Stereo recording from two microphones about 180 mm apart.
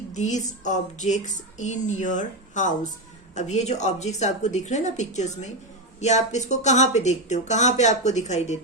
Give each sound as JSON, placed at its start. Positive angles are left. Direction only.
{"t": 0.1, "sound": "speech", "side_deg": 40}